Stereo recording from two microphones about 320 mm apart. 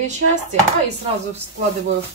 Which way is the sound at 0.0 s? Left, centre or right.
Right.